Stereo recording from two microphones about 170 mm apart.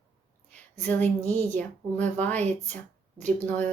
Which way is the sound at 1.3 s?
45° right (ahead or behind).